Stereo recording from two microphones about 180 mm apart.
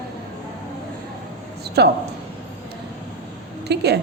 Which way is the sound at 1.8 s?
65° right (ahead or behind).